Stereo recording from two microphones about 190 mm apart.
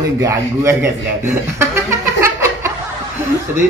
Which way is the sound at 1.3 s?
10° right (ahead or behind).